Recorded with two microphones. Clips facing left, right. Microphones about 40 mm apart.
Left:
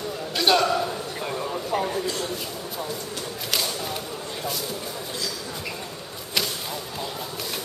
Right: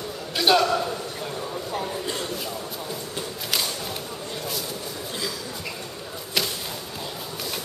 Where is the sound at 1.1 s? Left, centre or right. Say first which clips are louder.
Left 2 dB; left.